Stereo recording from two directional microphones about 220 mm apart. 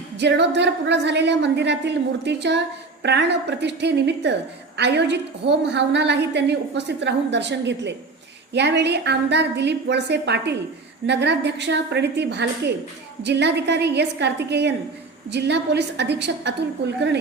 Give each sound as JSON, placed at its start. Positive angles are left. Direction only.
{"t": 0.2, "sound": "a woman's voice", "side_deg": -50}